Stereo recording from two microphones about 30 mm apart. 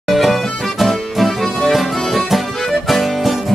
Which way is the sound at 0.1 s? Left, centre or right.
Centre.